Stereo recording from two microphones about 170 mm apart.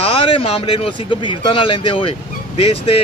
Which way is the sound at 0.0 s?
35° left (ahead or behind).